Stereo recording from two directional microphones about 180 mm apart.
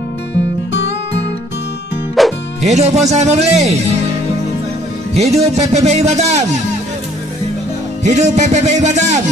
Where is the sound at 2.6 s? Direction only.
40° right (ahead or behind).